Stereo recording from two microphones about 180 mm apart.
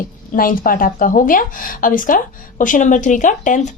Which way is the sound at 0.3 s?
50° left (ahead or behind).